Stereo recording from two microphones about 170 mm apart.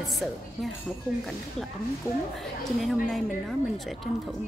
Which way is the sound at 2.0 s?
15° right (ahead or behind).